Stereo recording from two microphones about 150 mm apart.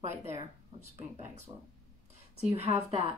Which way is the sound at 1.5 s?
35° right (ahead or behind).